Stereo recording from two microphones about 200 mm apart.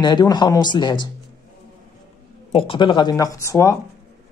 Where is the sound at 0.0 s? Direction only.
20° left (ahead or behind).